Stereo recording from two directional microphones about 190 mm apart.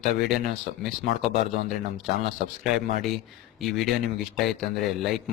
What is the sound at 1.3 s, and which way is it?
Speech, 40° right (ahead or behind).